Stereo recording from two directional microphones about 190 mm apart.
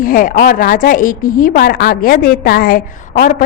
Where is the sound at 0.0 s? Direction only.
45° left (ahead or behind).